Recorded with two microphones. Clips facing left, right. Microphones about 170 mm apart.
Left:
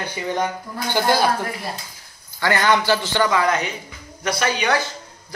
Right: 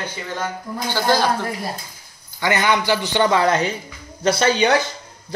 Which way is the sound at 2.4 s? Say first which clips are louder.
Even; 20° right (ahead or behind).